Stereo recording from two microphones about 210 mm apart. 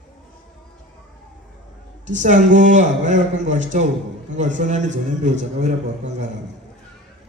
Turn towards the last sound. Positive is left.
turn(degrees=-35)  # may be behind; listen again after turning